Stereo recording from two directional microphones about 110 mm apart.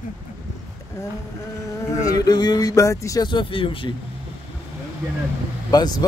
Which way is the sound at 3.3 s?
50° left (ahead or behind).